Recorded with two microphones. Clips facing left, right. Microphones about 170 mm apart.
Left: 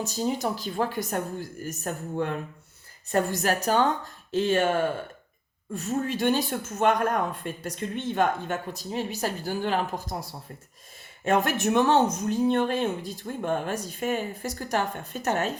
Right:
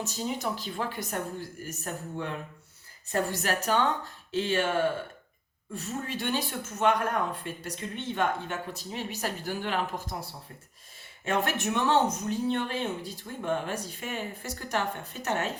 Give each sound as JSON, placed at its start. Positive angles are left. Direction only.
{"t": 0.0, "sound": "speech", "side_deg": 40}
{"t": 5.7, "sound": "speech", "side_deg": 45}
{"t": 11.3, "sound": "speech", "side_deg": 45}